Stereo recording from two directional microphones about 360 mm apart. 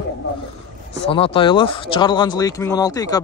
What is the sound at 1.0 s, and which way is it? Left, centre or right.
Speech, centre.